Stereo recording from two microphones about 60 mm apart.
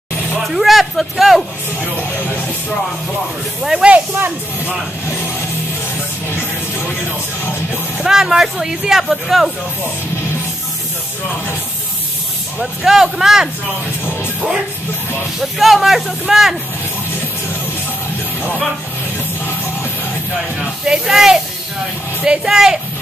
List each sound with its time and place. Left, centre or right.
0.5 s speech: centre
3.8 s speech: centre
8.0 s speech: centre
12.5 s speech: centre
15.4 s speech: centre
20.5 s speech: centre